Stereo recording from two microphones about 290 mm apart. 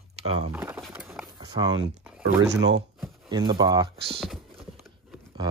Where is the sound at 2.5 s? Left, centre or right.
Right.